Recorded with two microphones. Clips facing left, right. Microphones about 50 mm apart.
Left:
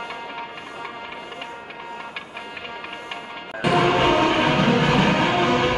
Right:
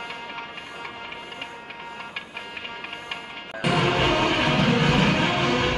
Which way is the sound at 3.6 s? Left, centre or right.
Centre.